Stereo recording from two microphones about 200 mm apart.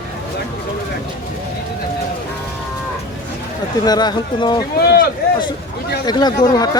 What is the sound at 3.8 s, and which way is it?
Speech, 20° left (ahead or behind).